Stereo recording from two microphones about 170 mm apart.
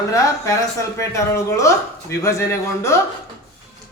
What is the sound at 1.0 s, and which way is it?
Speech, 15° left (ahead or behind).